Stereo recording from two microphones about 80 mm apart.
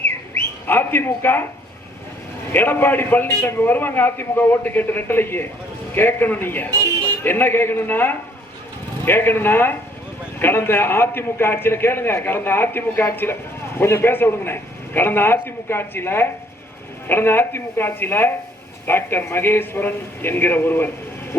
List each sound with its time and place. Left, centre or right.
0.7 s speech: left
2.5 s a man's voice: left